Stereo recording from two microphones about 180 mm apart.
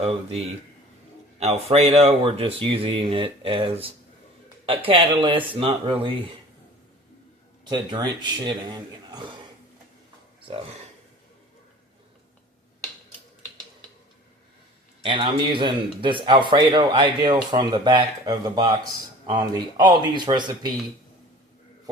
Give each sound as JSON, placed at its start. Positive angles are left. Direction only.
{"t": 1.4, "sound": "speech", "side_deg": -35}
{"t": 7.7, "sound": "speech", "side_deg": -20}
{"t": 15.0, "sound": "speech", "side_deg": -30}